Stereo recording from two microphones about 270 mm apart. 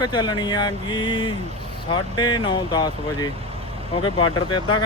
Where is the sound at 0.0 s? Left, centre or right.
Centre.